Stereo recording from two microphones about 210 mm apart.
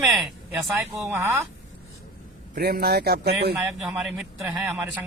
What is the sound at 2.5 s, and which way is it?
Speech, 45° right (ahead or behind).